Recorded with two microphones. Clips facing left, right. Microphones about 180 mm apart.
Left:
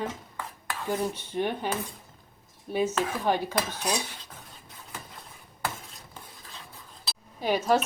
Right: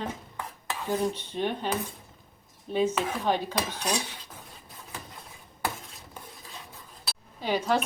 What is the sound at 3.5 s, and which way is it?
Cutlery, 15° right (ahead or behind).